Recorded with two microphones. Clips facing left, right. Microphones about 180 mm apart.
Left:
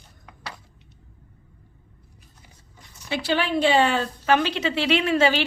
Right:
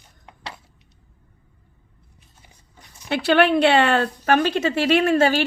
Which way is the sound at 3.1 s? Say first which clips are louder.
Right 7 dB; 65° right (ahead or behind).